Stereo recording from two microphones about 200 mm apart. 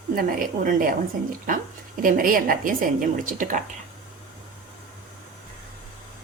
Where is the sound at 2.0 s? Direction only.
45° right (ahead or behind).